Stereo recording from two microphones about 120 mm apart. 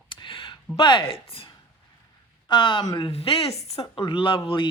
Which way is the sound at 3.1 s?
55° left (ahead or behind).